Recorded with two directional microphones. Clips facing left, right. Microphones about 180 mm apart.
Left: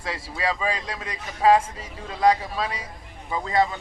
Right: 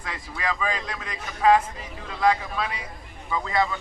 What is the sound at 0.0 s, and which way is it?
A man's voice, 30° left (ahead or behind).